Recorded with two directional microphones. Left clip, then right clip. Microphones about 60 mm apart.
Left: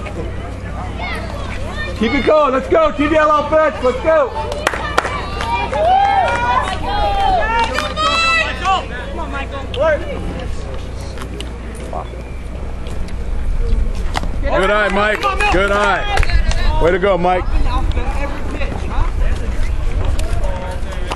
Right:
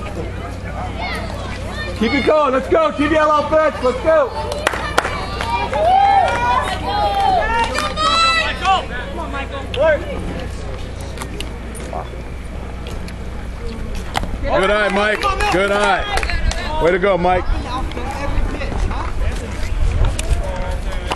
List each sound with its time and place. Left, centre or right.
2.0 s a man's voice: left
5.8 s run: left
8.5 s a sound: right
14.4 s speech: left